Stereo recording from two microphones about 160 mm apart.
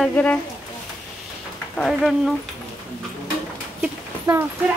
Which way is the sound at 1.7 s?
Centre (ahead or behind).